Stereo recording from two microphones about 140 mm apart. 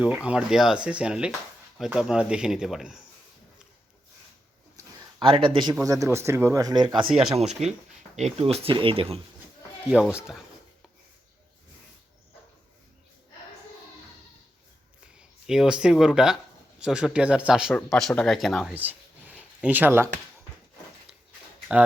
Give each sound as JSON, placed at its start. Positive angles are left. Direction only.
{"t": 0.0, "sound": "speech", "side_deg": -10}
{"t": 4.8, "sound": "a sound", "side_deg": -25}
{"t": 5.2, "sound": "speech", "side_deg": -40}
{"t": 5.8, "sound": "speech", "side_deg": -25}
{"t": 7.3, "sound": "speech", "side_deg": -50}
{"t": 9.9, "sound": "speech", "side_deg": -5}
{"t": 15.2, "sound": "speech", "side_deg": -5}
{"t": 18.7, "sound": "a sound", "side_deg": -10}
{"t": 19.6, "sound": "speech", "side_deg": -15}